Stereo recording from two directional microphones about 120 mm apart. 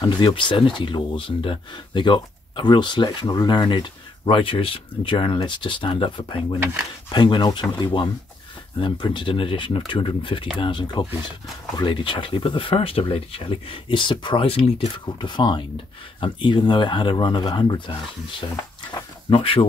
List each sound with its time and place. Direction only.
0.0 s speech: 40° left (ahead or behind)
15.1 s speech: 40° left (ahead or behind)
19.2 s speech: 45° left (ahead or behind)